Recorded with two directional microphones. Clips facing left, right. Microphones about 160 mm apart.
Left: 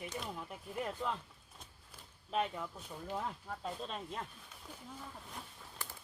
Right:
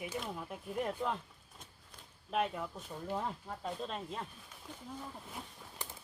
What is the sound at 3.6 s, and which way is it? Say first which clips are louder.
Speech: right 3 dB; centre (ahead or behind).